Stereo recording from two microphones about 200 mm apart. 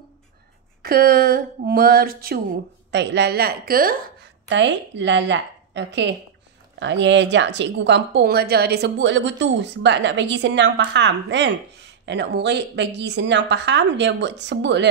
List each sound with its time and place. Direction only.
0.8 s speech: 50° right (ahead or behind)
2.9 s speech: 60° right (ahead or behind)
4.5 s a woman's voice: 65° right (ahead or behind)